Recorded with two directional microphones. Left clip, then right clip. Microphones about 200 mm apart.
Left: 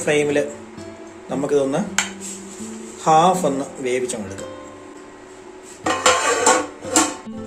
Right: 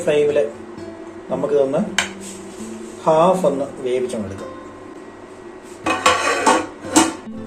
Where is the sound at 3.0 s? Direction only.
25° left (ahead or behind).